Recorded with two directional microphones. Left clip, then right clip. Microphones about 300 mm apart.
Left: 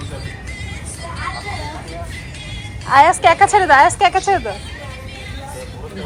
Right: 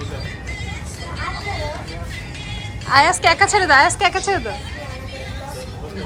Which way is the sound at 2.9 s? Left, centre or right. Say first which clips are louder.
Left 3 dB; centre.